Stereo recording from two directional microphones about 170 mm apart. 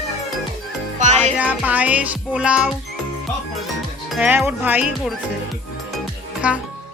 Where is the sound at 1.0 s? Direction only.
45° right (ahead or behind).